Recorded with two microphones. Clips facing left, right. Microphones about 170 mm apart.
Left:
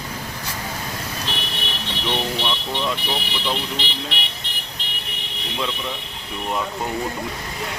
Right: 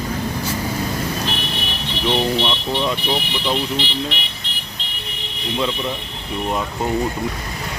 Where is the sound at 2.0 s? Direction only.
20° right (ahead or behind).